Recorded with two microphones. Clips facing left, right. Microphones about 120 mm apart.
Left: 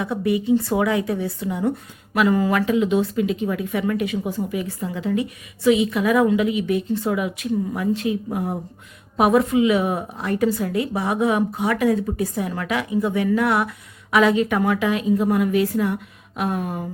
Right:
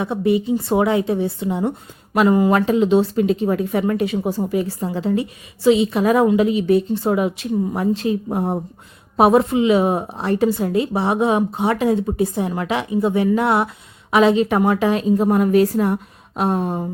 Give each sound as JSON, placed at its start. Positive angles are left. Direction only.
{"t": 0.0, "sound": "a woman's voice", "side_deg": -25}